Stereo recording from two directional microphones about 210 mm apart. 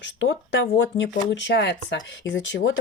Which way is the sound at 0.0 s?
60° left (ahead or behind).